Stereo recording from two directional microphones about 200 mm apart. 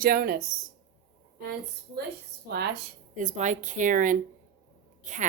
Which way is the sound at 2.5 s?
55° right (ahead or behind).